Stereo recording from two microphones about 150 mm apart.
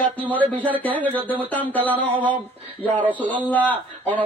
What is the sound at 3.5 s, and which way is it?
Speech, 10° left (ahead or behind).